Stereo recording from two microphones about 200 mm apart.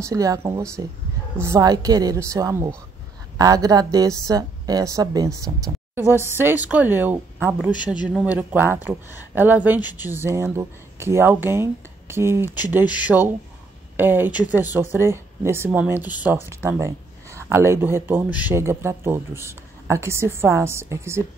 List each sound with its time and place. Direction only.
0.0 s speech: 15° right (ahead or behind)
7.7 s speech: 20° left (ahead or behind)
8.1 s speech: 5° right (ahead or behind)